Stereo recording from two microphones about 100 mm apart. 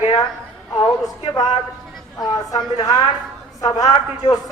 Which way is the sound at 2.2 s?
55° left (ahead or behind).